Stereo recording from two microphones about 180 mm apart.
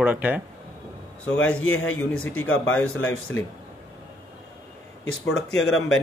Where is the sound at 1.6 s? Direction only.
90° left.